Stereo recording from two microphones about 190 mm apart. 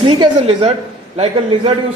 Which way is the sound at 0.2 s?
35° right (ahead or behind).